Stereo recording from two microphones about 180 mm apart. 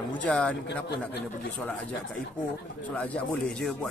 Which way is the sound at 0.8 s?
65° left (ahead or behind).